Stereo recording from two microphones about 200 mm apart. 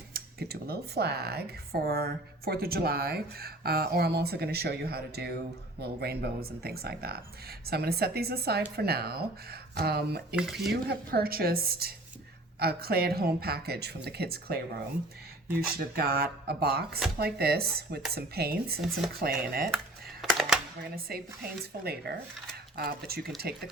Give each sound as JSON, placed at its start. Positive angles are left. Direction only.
{"t": 0.1, "sound": "speech", "side_deg": -55}
{"t": 10.3, "sound": "speech", "side_deg": 0}
{"t": 10.8, "sound": "speech", "side_deg": -50}
{"t": 20.2, "sound": "speech", "side_deg": 0}
{"t": 20.9, "sound": "speech", "side_deg": -50}